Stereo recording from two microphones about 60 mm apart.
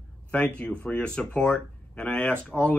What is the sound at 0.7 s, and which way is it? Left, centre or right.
Speech, left.